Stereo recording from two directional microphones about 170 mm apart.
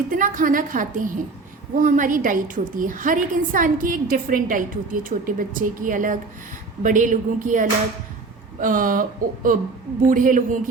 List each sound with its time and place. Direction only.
0.1 s a woman's voice: 50° right (ahead or behind)